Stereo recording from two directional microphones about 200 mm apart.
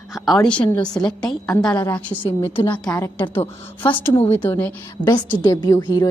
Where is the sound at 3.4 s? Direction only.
25° left (ahead or behind).